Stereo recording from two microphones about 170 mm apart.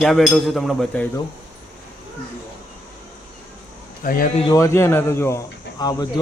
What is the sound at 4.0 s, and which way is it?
Speech, 55° left (ahead or behind).